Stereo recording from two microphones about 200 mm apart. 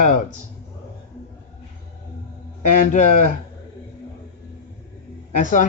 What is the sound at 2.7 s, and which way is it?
Speech, 40° left (ahead or behind).